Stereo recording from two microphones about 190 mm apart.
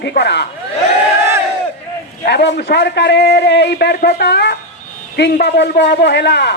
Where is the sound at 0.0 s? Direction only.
60° left (ahead or behind).